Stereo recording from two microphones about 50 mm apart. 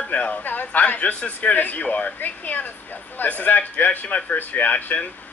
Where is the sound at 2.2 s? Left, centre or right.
Left.